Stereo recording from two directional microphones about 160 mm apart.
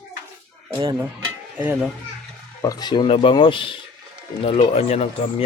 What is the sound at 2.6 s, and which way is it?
Speech, 25° left (ahead or behind).